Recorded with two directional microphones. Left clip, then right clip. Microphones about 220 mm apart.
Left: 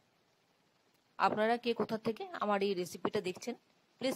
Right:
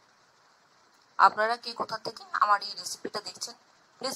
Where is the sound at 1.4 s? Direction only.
40° left (ahead or behind).